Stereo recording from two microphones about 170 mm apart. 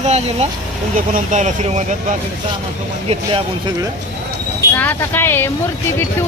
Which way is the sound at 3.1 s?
35° right (ahead or behind).